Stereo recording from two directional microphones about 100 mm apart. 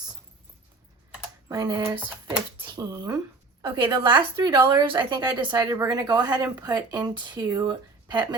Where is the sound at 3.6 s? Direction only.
45° right (ahead or behind).